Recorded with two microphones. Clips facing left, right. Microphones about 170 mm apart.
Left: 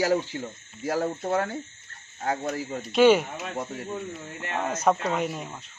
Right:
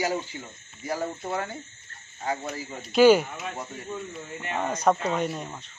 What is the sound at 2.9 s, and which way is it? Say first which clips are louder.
Speech: right 1 dB; centre (ahead or behind).